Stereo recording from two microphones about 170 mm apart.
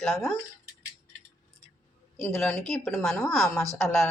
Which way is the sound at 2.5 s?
Centre (ahead or behind).